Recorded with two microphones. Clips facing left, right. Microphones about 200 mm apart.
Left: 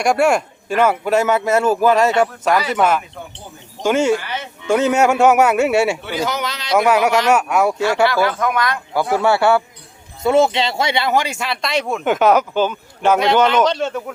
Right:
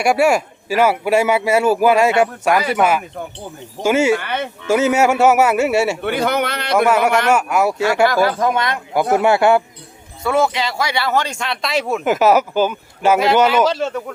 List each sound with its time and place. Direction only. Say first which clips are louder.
0.0 s speech: right 1 dB; 5° right (ahead or behind)
4.2 s a man's voice: right 5 dB; 60° right (ahead or behind)
4.6 s speech: even; 5° right (ahead or behind)
6.0 s a man's voice: right 4 dB; 55° right (ahead or behind)
6.7 s speech: even; centre (ahead or behind)
8.0 s speech: right 3 dB; 40° right (ahead or behind); by 9.6 s 15° right (ahead or behind)
10.2 s speech: left 3 dB; 25° left (ahead or behind); by 14.0 s centre (ahead or behind)